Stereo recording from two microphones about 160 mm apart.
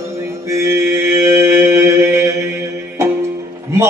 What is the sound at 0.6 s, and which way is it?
Mantra, 15° right (ahead or behind).